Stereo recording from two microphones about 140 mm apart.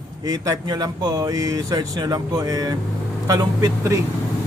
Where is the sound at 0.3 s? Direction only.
25° right (ahead or behind).